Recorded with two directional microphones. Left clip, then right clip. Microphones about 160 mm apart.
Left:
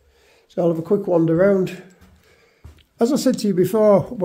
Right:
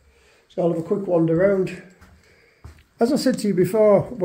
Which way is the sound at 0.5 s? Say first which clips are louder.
Left 3 dB; 55° left (ahead or behind).